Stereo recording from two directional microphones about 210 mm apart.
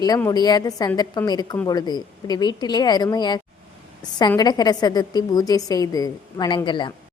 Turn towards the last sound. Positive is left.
turn(degrees=20)  # may be behind; listen again after turning